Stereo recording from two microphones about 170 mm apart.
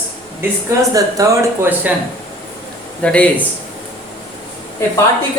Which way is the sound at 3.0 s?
5° left (ahead or behind).